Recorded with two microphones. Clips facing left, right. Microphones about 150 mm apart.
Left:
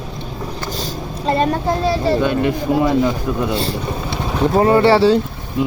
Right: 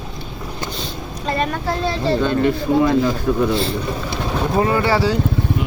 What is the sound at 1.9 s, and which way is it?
Speech, 5° left (ahead or behind).